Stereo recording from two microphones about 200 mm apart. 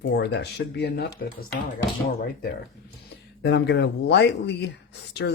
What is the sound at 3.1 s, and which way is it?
Speech, 55° left (ahead or behind).